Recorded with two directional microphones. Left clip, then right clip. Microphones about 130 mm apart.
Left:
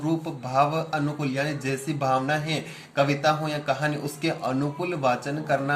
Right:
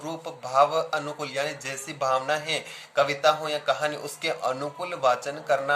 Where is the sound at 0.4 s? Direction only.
40° right (ahead or behind).